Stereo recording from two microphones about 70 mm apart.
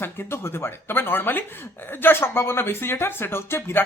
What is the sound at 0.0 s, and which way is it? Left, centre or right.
Speech, left.